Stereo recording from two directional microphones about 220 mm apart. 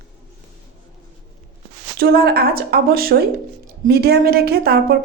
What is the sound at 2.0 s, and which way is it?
Speech, 45° right (ahead or behind).